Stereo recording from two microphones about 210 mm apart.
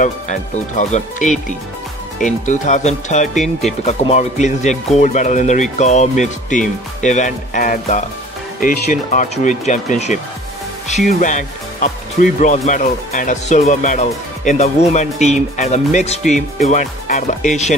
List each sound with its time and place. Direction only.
0.0 s speech: 35° left (ahead or behind)